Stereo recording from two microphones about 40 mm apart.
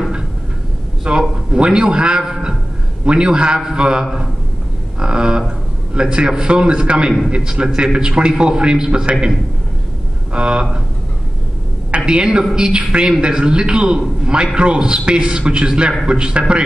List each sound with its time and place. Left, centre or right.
1.3 s a man's voice: right
5.0 s a man's voice: right
10.3 s a man's voice: right
12.1 s a man's voice: right